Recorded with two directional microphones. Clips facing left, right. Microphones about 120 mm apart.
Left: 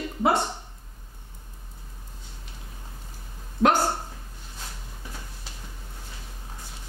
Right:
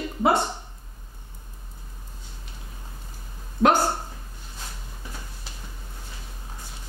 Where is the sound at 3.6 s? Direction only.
10° right (ahead or behind).